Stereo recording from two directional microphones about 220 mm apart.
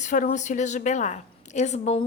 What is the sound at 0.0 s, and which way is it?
A woman's voice, 35° left (ahead or behind).